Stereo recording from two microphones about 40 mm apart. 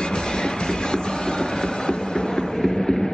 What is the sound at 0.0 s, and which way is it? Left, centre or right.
Train, centre.